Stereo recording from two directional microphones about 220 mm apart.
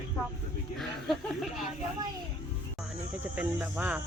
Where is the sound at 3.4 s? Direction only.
10° right (ahead or behind).